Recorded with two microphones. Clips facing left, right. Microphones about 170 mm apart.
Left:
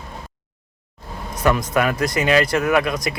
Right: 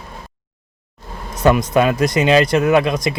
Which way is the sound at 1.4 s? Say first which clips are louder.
Right 5 dB; 20° right (ahead or behind).